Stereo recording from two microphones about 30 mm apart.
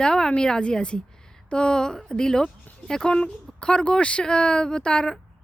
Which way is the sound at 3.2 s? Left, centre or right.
Left.